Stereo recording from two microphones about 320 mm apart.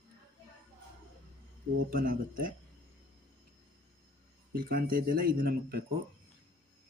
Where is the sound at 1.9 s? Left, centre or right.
Right.